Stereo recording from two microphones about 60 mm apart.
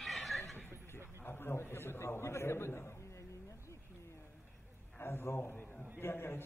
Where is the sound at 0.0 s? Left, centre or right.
Centre.